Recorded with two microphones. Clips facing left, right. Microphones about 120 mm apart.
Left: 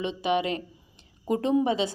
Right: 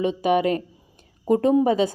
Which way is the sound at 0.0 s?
45° right (ahead or behind).